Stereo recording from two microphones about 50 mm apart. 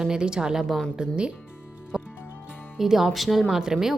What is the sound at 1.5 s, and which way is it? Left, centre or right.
Music, left.